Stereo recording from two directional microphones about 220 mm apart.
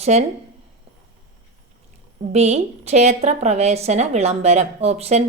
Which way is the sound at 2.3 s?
30° right (ahead or behind).